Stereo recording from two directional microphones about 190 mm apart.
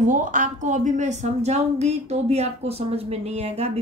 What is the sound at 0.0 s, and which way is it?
A woman's voice, 40° right (ahead or behind).